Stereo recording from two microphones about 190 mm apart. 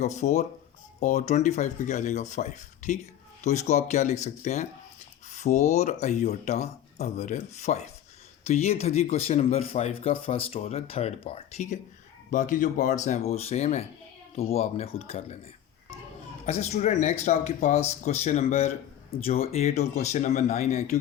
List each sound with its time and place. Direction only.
0.0 s speech: 40° left (ahead or behind)
16.5 s speech: 35° left (ahead or behind)